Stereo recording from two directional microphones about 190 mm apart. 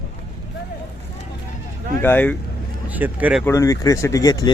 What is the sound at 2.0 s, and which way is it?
Speech, 10° left (ahead or behind).